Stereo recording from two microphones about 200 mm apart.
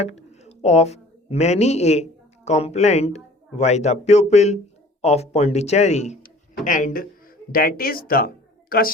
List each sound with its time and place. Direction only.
0.0 s a woman's voice: 35° left (ahead or behind)